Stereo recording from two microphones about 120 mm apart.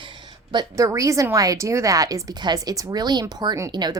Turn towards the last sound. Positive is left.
turn(degrees=-35)  # may be behind; listen again after turning